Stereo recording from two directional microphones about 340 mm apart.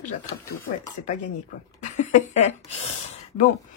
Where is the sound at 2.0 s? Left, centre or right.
Left.